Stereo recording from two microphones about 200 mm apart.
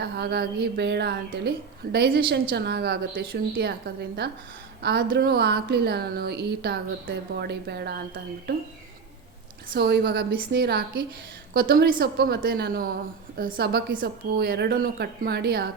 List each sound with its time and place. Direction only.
0.0 s a woman's voice: 55° right (ahead or behind)
9.7 s a woman's voice: 55° right (ahead or behind)